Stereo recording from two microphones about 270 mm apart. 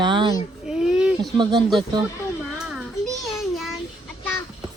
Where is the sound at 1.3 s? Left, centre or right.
Centre.